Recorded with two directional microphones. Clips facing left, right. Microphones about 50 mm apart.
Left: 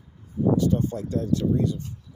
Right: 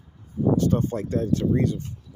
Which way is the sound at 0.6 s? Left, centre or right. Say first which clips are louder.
Right 1 dB; right.